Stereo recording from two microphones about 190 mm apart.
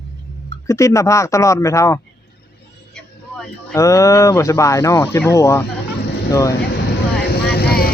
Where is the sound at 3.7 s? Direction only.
15° left (ahead or behind).